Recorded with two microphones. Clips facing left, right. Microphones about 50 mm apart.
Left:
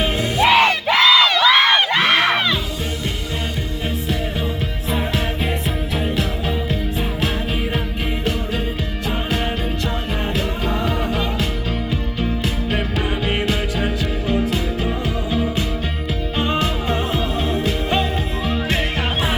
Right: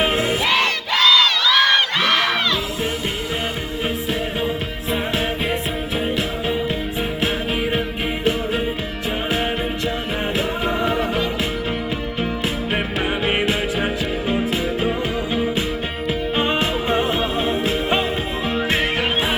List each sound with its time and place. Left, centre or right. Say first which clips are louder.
0.0 s music: right 1 dB; centre
0.4 s music: left 5 dB; centre
1.5 s crowd: left 2 dB; centre
4.9 s music: right 1 dB; centre
10.8 s music: right 2 dB; centre
12.7 s music: right 1 dB; right